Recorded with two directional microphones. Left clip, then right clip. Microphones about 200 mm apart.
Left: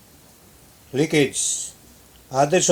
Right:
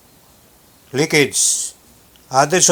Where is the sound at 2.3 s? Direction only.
20° right (ahead or behind).